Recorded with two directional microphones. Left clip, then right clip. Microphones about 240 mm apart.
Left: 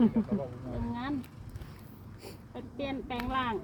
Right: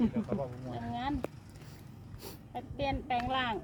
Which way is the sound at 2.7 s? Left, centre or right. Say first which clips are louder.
Right 3 dB; right.